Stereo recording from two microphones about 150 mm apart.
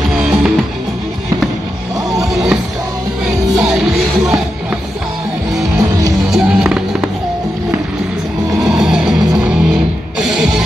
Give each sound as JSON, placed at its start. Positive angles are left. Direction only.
{"t": 0.1, "sound": "music", "side_deg": 0}
{"t": 2.2, "sound": "music", "side_deg": -5}
{"t": 5.8, "sound": "music", "side_deg": -25}
{"t": 6.3, "sound": "music", "side_deg": -5}
{"t": 8.5, "sound": "music", "side_deg": -5}